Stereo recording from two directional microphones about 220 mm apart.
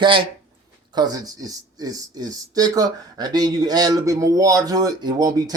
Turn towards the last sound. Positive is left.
turn(degrees=-15)  # may be behind; listen again after turning